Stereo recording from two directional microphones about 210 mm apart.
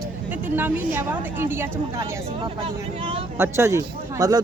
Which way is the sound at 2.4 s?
25° right (ahead or behind).